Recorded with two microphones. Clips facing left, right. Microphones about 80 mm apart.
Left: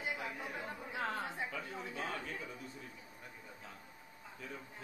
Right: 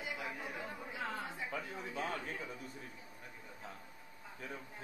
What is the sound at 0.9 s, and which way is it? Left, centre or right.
Chatter, left.